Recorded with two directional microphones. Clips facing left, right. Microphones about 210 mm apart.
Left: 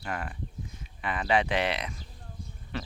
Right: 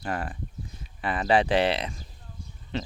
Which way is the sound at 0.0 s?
35° right (ahead or behind).